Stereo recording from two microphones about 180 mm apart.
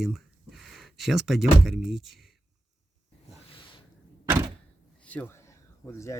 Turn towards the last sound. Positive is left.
turn(degrees=15)  # may be behind; listen again after turning